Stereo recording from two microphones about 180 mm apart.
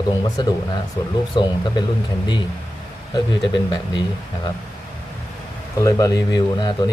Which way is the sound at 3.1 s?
25° left (ahead or behind).